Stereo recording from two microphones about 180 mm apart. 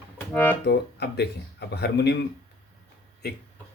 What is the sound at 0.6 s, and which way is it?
Speech, 65° left (ahead or behind).